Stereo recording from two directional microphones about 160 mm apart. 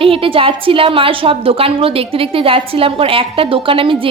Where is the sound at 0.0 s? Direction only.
35° right (ahead or behind).